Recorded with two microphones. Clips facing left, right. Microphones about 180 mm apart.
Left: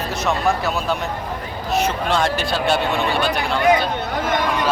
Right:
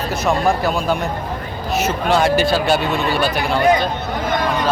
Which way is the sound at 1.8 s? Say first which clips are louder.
Right 4 dB; 5° right (ahead or behind).